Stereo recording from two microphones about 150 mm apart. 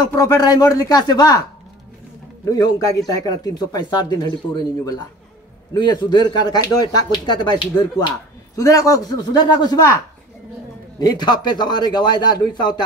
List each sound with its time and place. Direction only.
0.1 s speech: 25° left (ahead or behind)
2.4 s speech: 25° left (ahead or behind)
11.0 s speech: 25° left (ahead or behind)